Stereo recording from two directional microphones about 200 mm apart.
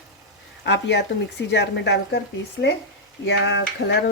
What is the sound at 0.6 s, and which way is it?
Speech, 60° left (ahead or behind).